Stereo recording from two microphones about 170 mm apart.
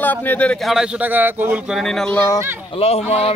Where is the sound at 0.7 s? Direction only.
10° right (ahead or behind).